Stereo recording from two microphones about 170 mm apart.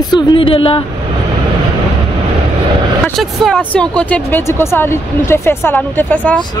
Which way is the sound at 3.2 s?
Centre (ahead or behind).